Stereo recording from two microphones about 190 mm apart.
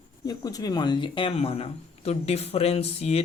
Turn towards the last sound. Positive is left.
turn(degrees=35)  # may be behind; listen again after turning